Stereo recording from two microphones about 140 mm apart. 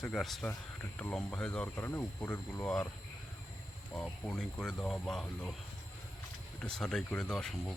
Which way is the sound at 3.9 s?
10° left (ahead or behind).